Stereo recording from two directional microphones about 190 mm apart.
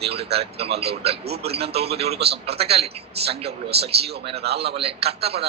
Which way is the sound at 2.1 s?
60° right (ahead or behind).